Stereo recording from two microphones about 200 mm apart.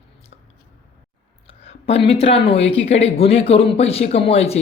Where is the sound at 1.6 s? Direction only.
30° left (ahead or behind).